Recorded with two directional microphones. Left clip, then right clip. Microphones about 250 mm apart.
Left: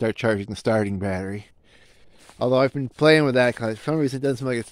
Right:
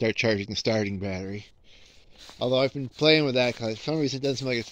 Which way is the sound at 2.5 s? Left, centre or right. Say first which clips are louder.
Left 4 dB; left.